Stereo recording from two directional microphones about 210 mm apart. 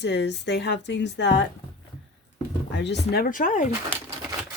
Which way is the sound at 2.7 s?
55° left (ahead or behind).